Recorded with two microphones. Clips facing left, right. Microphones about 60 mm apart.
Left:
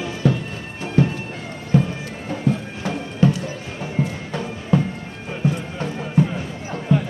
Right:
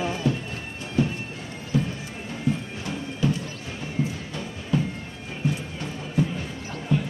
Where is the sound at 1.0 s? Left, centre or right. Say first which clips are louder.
Left 5 dB; left.